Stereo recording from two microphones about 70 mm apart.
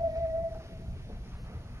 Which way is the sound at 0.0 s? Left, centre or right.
Right.